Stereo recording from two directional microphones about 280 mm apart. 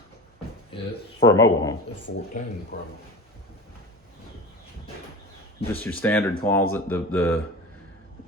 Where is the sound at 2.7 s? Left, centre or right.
Left.